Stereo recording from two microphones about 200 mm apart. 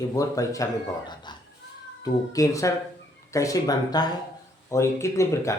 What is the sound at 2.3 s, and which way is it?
Speech, 15° left (ahead or behind).